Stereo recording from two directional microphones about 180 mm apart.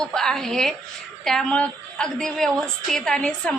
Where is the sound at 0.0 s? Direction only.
5° left (ahead or behind).